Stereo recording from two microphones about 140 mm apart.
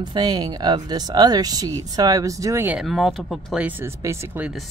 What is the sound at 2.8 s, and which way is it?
Speech, centre (ahead or behind).